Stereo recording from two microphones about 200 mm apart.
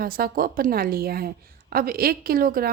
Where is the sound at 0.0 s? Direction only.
45° right (ahead or behind).